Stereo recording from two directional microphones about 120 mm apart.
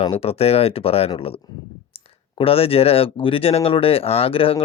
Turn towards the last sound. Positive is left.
turn(degrees=50)  # may be behind; listen again after turning